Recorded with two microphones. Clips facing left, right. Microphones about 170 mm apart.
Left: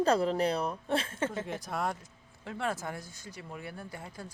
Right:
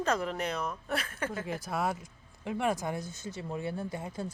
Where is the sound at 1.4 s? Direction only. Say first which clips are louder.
Right 2 dB; 5° right (ahead or behind).